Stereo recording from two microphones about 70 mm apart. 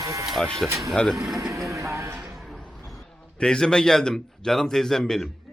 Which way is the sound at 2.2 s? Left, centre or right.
Centre.